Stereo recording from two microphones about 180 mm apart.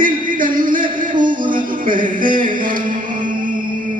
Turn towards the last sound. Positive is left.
turn(degrees=-50)  # may be behind; listen again after turning